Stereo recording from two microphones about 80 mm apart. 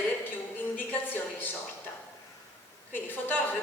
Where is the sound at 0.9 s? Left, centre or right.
Left.